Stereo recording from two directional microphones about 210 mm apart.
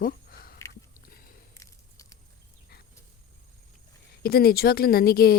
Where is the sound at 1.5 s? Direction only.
15° left (ahead or behind).